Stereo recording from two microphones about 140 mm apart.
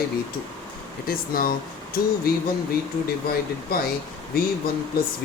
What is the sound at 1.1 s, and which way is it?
Speech, 90° left.